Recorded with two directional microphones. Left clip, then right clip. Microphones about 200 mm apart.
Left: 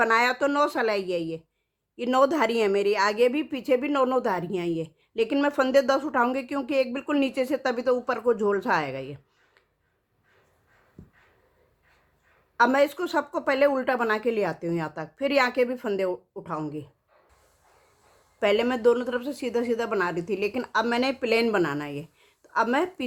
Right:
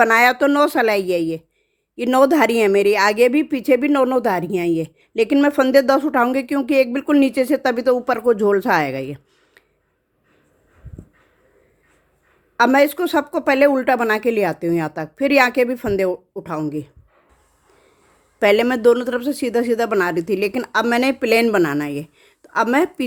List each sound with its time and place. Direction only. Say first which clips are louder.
0.0 s a woman's voice: right 8 dB; 35° right (ahead or behind)
12.5 s a woman's voice: right 7 dB; 35° right (ahead or behind)
18.3 s a woman's voice: right 8 dB; 35° right (ahead or behind)